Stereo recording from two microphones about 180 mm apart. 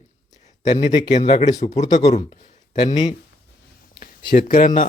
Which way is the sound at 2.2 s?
30° left (ahead or behind).